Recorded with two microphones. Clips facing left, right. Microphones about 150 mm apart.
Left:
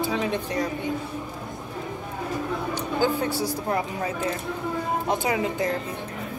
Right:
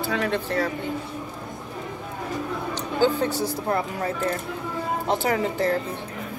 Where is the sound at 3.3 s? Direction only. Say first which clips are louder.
Right 1 dB; 15° left (ahead or behind).